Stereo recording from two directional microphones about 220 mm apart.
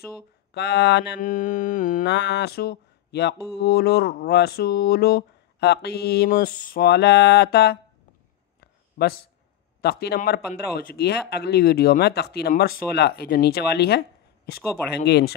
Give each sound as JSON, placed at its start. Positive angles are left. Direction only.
{"t": 0.5, "sound": "speech", "side_deg": 50}
{"t": 8.5, "sound": "a sound", "side_deg": 45}
{"t": 9.8, "sound": "speech", "side_deg": 45}